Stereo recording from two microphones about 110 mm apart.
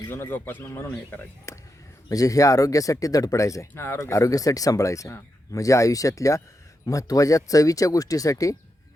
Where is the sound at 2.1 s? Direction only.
30° left (ahead or behind).